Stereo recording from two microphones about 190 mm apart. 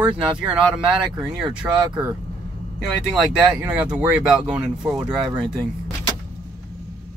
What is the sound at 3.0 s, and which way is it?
Speech, 5° right (ahead or behind).